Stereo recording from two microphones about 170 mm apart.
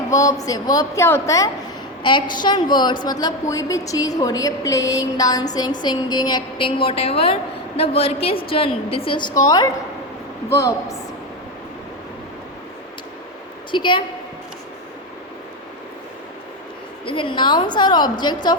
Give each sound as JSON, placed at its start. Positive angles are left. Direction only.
{"t": 0.1, "sound": "a woman's voice", "side_deg": 20}
{"t": 2.0, "sound": "a woman's voice", "side_deg": 25}
{"t": 10.5, "sound": "a woman's voice", "side_deg": 15}
{"t": 13.7, "sound": "a woman's voice", "side_deg": 30}
{"t": 17.1, "sound": "a woman's voice", "side_deg": 30}